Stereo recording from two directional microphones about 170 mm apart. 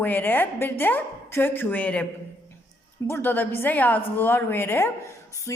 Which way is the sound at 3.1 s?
10° left (ahead or behind).